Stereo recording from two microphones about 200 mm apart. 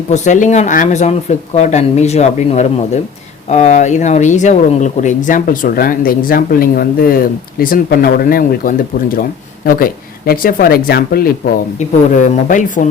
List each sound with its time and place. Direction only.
0.1 s speech: 40° left (ahead or behind)
11.8 s speech: 35° left (ahead or behind)